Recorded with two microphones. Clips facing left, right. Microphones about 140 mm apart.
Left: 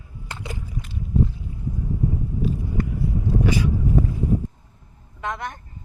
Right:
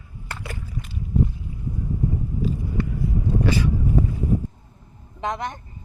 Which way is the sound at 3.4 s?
15° left (ahead or behind).